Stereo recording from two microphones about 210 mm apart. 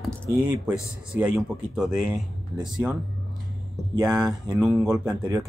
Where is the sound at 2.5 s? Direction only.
20° right (ahead or behind).